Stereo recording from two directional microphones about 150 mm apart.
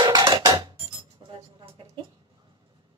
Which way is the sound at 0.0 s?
30° right (ahead or behind).